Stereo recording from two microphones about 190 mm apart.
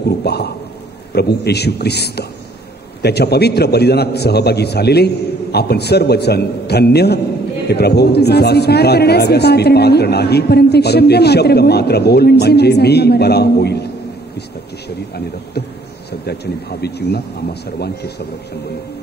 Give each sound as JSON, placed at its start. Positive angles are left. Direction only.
{"t": 0.2, "sound": "speech", "side_deg": 60}
{"t": 16.8, "sound": "speech", "side_deg": 60}